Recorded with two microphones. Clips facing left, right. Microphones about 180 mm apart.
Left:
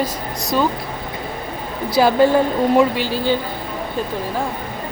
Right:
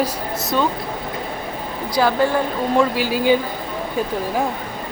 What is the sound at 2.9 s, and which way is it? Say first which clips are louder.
Speech: right 2 dB; 10° right (ahead or behind).